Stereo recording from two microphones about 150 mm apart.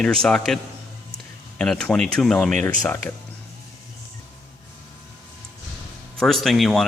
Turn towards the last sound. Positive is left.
turn(degrees=0)  # may be behind; listen again after turning